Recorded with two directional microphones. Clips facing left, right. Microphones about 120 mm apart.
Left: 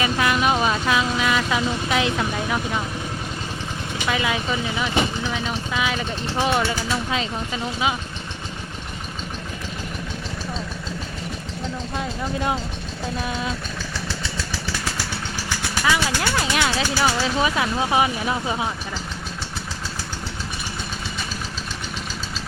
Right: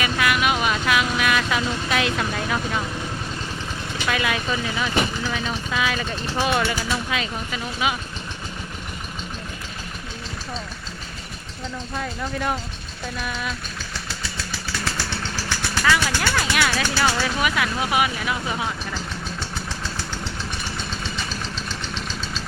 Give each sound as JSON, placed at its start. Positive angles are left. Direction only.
{"t": 0.0, "sound": "vehicle", "side_deg": 30}
{"t": 4.0, "sound": "speech", "side_deg": 20}
{"t": 11.9, "sound": "speech", "side_deg": 20}
{"t": 15.4, "sound": "vehicle", "side_deg": 15}
{"t": 16.9, "sound": "speech", "side_deg": 10}
{"t": 17.4, "sound": "speech", "side_deg": 25}